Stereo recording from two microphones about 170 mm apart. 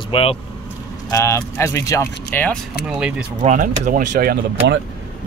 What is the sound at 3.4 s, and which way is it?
Speech, 50° right (ahead or behind).